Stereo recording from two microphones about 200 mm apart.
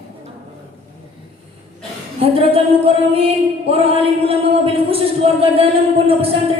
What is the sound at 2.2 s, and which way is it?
Speech, 30° right (ahead or behind).